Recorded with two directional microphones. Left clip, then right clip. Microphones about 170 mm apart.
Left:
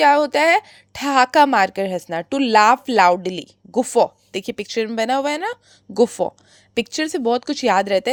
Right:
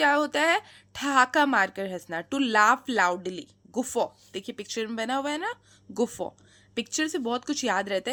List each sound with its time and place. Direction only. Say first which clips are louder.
0.0 s a woman's voice: left 9 dB; 30° left (ahead or behind)